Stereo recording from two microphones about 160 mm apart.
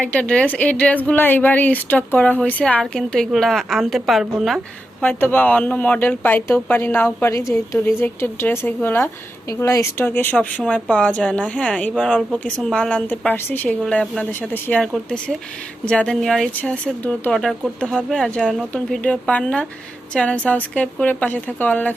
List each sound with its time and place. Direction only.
0.0 s a woman's voice: 10° left (ahead or behind)